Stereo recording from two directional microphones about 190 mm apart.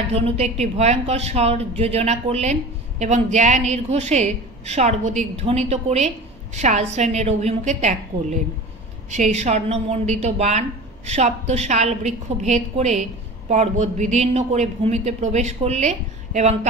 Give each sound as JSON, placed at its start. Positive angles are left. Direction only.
{"t": 0.1, "sound": "a woman's voice", "side_deg": -35}